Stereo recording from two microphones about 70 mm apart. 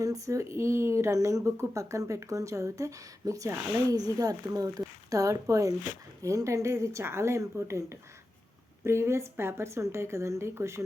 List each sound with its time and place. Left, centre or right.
0.0 s a woman's voice: right